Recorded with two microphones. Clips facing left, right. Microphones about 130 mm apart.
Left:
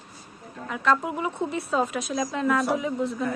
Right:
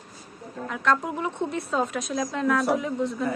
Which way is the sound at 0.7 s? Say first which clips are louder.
Left 1 dB; 5° left (ahead or behind).